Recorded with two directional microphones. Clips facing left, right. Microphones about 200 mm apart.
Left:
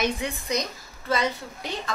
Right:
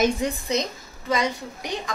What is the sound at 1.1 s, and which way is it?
Speech, 15° right (ahead or behind).